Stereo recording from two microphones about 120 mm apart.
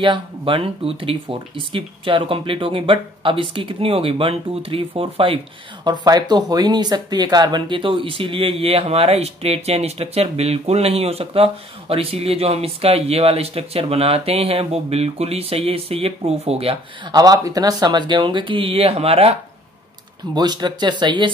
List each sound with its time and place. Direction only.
0.0 s speech: 45° right (ahead or behind)
5.9 s speech: 35° right (ahead or behind); by 16.7 s 55° right (ahead or behind)
17.0 s speech: 35° right (ahead or behind); by 19.3 s 55° right (ahead or behind)
20.3 s speech: 35° right (ahead or behind)